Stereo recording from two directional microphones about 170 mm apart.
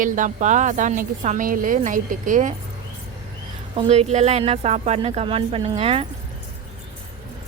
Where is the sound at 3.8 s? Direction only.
40° right (ahead or behind).